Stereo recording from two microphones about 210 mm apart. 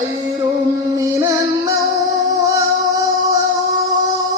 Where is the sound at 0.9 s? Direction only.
15° right (ahead or behind).